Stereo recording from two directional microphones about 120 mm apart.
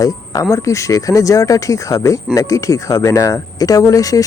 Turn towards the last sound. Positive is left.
turn(degrees=30)  # may be behind; listen again after turning